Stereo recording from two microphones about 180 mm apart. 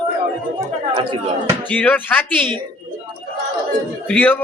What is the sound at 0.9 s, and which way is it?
Speech, 25° right (ahead or behind).